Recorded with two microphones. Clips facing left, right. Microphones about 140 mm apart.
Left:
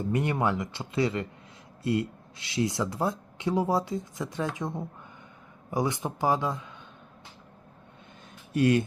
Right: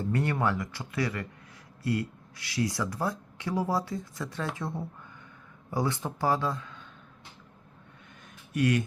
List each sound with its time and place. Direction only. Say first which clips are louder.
0.0 s a man's voice: left 1 dB; 15° left (ahead or behind)
8.5 s speech: left 3 dB; 30° left (ahead or behind)